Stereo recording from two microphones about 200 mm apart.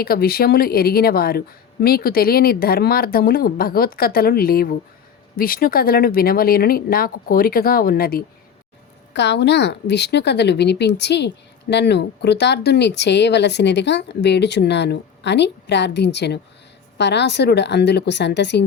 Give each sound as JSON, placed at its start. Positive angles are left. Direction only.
{"t": 0.0, "sound": "speech", "side_deg": 50}
{"t": 9.1, "sound": "speech", "side_deg": 60}